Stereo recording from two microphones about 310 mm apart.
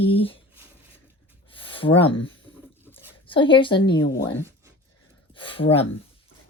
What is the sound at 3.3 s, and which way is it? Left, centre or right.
Speech, centre.